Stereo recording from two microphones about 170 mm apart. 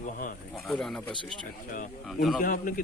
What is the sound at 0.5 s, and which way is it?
Speech, centre (ahead or behind).